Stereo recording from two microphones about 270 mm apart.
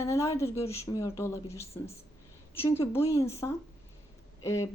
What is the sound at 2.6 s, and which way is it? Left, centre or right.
A woman's voice, centre.